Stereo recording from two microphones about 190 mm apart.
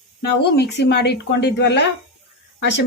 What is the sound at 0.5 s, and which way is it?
Speech, 60° left (ahead or behind).